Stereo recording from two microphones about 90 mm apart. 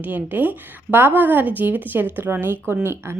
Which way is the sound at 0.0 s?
20° right (ahead or behind).